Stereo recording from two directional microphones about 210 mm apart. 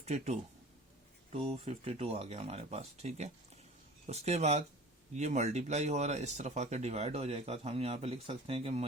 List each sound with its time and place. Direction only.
0.0 s speech: 30° right (ahead or behind)